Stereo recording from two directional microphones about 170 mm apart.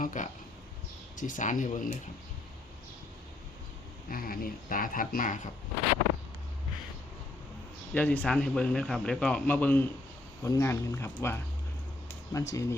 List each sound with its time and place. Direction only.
0.0 s speech: 50° left (ahead or behind)
4.1 s speech: 55° left (ahead or behind)
7.9 s a man's voice: 10° left (ahead or behind)